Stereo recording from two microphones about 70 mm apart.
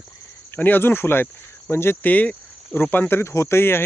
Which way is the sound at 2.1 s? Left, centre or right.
Left.